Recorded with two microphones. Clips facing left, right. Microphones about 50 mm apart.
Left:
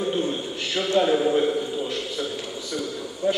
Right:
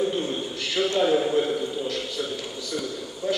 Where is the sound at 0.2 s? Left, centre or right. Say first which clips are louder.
Left 2 dB; centre.